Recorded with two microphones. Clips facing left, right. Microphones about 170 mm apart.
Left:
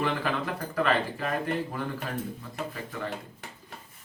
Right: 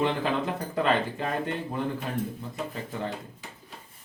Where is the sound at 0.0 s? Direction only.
25° right (ahead or behind).